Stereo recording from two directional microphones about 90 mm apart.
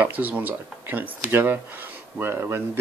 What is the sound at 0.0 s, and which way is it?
Speech, 20° right (ahead or behind).